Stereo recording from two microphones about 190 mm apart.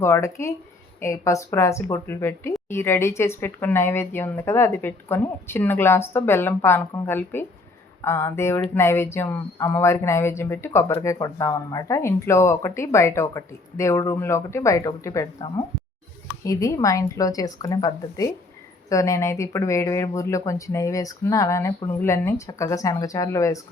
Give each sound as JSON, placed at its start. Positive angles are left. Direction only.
{"t": 0.0, "sound": "speech", "side_deg": 15}